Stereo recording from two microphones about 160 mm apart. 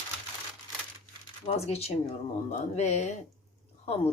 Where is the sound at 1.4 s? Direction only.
40° left (ahead or behind).